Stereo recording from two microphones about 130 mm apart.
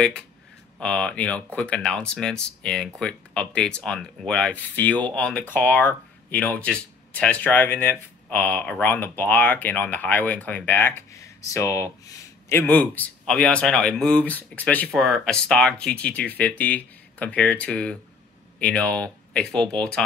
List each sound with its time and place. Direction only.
0.7 s speech: 5° left (ahead or behind)
14.9 s speech: centre (ahead or behind)